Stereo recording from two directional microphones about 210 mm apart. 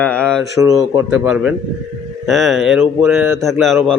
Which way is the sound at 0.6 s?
15° right (ahead or behind).